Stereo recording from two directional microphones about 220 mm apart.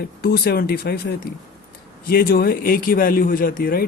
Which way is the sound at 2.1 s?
45° left (ahead or behind).